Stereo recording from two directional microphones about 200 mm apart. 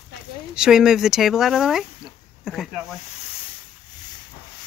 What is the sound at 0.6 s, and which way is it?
Speech, centre (ahead or behind).